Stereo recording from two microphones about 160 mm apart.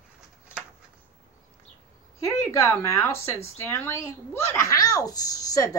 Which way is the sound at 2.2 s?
20° left (ahead or behind).